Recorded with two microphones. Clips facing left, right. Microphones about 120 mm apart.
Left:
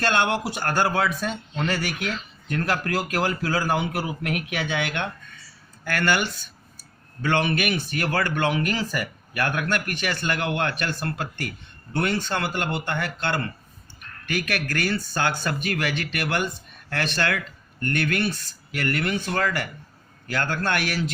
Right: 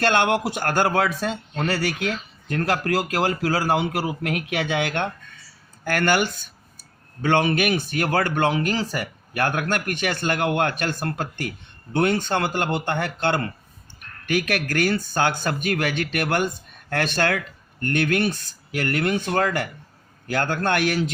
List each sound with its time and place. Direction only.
0.3 s speech: 45° right (ahead or behind)
2.5 s speech: 35° right (ahead or behind)
11.9 s speech: 50° right (ahead or behind)